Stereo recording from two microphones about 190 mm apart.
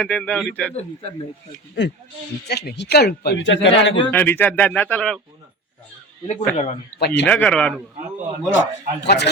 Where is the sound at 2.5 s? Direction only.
60° left (ahead or behind).